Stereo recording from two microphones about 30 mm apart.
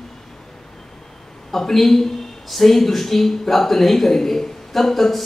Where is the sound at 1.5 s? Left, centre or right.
Centre.